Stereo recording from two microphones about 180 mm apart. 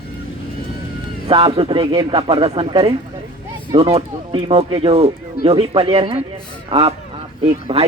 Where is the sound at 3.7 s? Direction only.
30° right (ahead or behind).